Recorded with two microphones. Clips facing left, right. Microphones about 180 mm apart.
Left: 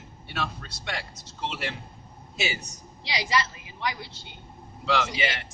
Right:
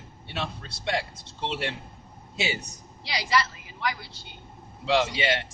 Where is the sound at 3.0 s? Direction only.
20° left (ahead or behind).